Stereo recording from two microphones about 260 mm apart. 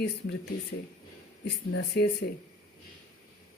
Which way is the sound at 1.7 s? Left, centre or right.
Left.